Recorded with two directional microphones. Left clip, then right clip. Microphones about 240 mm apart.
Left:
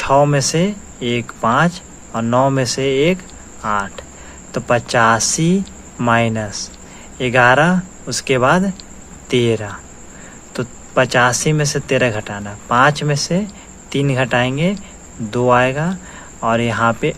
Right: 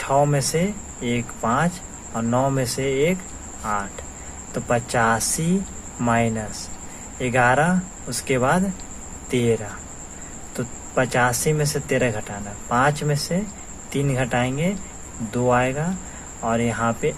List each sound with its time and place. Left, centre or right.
0.0 s speech: left